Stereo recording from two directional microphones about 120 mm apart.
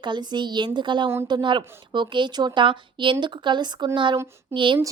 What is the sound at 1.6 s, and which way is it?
Speech, 20° right (ahead or behind).